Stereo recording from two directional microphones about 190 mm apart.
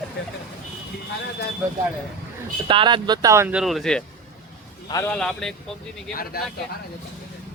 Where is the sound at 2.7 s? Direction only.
25° right (ahead or behind); by 5.5 s 5° left (ahead or behind).